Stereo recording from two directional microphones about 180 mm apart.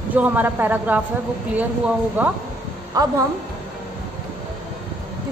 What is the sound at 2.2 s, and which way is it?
A woman's voice, 10° right (ahead or behind).